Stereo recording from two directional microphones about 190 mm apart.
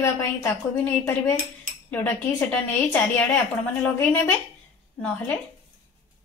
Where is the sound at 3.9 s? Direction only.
10° left (ahead or behind).